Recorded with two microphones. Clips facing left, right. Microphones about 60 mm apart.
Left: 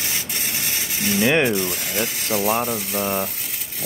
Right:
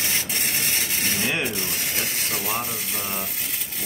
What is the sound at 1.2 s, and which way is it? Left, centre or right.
Speech, left.